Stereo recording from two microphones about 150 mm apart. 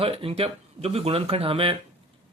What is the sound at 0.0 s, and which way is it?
Speech, 40° right (ahead or behind).